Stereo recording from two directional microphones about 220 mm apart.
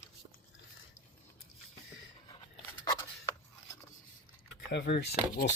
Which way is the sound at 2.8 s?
15° left (ahead or behind).